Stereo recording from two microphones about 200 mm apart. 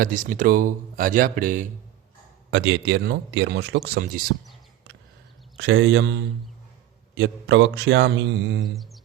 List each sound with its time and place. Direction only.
0.0 s speech: 45° right (ahead or behind)
2.5 s a man's voice: 60° right (ahead or behind)
5.5 s a man's voice: 60° right (ahead or behind)
7.2 s a man's voice: 60° right (ahead or behind)
8.6 s a sound: centre (ahead or behind)